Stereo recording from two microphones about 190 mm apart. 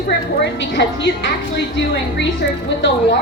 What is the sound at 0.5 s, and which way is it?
Speech, 65° left (ahead or behind).